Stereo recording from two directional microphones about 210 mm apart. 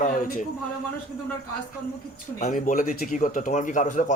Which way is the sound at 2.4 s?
35° left (ahead or behind).